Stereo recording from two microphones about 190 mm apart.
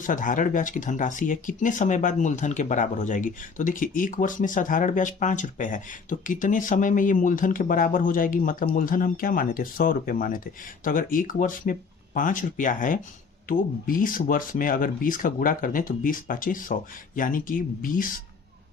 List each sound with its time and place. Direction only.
0.0 s speech: 45° left (ahead or behind)